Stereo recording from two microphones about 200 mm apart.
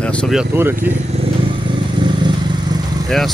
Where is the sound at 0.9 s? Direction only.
60° right (ahead or behind).